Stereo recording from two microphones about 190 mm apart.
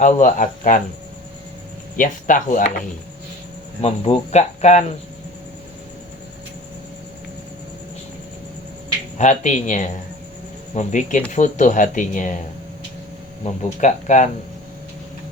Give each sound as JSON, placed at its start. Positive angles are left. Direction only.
{"t": 0.0, "sound": "speech", "side_deg": 40}
{"t": 2.0, "sound": "speech", "side_deg": 45}
{"t": 3.8, "sound": "speech", "side_deg": 30}
{"t": 9.1, "sound": "speech", "side_deg": 40}
{"t": 13.4, "sound": "speech", "side_deg": 40}